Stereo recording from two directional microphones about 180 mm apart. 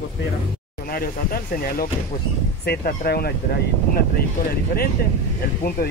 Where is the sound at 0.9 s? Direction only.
55° left (ahead or behind).